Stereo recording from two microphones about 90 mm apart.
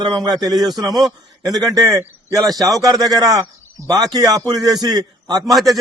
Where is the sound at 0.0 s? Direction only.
50° right (ahead or behind).